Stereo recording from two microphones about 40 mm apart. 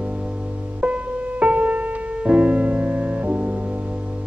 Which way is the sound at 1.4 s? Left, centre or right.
Right.